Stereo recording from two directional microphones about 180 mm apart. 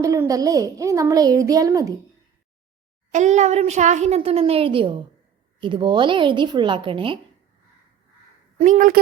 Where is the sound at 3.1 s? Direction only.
40° right (ahead or behind).